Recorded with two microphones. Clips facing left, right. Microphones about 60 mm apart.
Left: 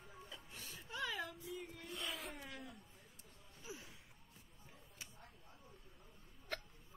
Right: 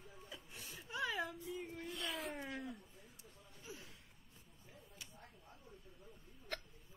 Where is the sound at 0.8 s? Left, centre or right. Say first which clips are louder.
Right 3 dB; centre.